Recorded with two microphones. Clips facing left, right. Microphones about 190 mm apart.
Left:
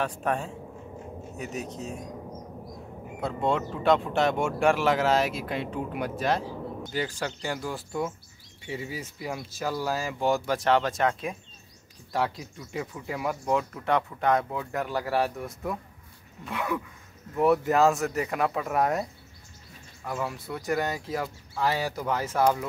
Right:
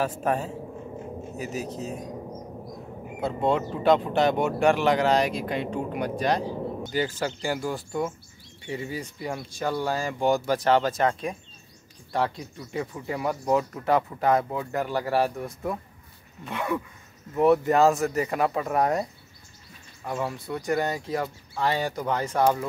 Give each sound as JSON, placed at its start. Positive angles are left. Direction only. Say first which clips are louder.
{"t": 0.2, "sound": "speech", "louder": "right 3 dB", "side_deg": -5}
{"t": 3.2, "sound": "speech", "louder": "right 2 dB", "side_deg": 0}
{"t": 20.1, "sound": "speech", "louder": "right 2 dB", "side_deg": 0}